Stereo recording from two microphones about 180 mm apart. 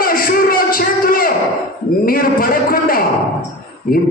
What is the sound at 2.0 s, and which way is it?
A man's voice, 55° left (ahead or behind).